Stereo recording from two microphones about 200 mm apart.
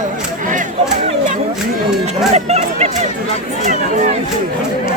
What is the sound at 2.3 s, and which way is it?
Speech, 35° right (ahead or behind).